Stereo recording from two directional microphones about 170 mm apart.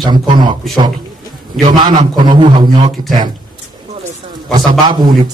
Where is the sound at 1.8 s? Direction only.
25° right (ahead or behind).